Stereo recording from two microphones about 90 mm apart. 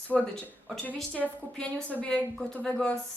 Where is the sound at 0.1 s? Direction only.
15° left (ahead or behind).